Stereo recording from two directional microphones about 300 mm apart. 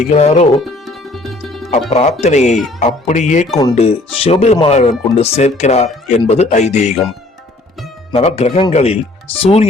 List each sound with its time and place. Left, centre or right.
0.1 s speech: left
0.6 s music: centre
1.9 s speech: left
8.1 s speech: centre